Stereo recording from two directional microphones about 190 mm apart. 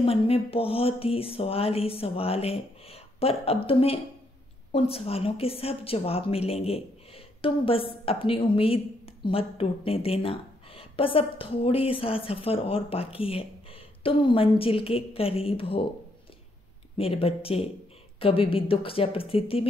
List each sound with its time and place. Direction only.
0.0 s a sound: 30° left (ahead or behind)
4.7 s a woman's voice: 30° left (ahead or behind)
16.9 s a woman's voice: 30° left (ahead or behind)